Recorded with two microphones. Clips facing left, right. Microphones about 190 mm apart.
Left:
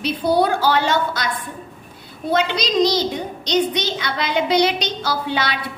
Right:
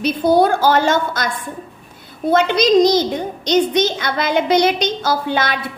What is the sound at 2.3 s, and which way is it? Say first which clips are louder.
A woman's voice: right 6 dB; 50° right (ahead or behind).